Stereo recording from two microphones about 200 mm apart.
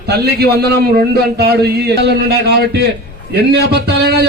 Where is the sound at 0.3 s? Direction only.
55° right (ahead or behind).